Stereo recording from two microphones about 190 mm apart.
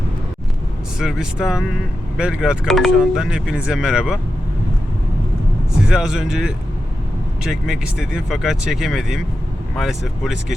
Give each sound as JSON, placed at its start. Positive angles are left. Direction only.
{"t": 0.9, "sound": "speech", "side_deg": -5}
{"t": 5.9, "sound": "speech", "side_deg": -5}